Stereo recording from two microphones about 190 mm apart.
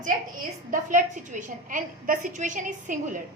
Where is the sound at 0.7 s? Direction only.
45° right (ahead or behind).